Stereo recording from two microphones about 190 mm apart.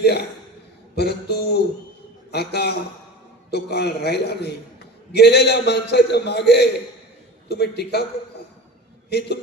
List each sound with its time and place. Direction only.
0.9 s a man's voice: 60° left (ahead or behind)
9.0 s a man's voice: 60° left (ahead or behind)